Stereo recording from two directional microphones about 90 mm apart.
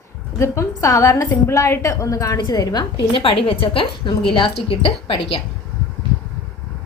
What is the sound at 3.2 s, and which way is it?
A woman's voice, 85° left.